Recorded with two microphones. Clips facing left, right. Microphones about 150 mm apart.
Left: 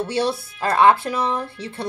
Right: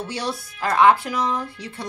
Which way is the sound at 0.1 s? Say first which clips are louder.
Left 6 dB; 25° left (ahead or behind).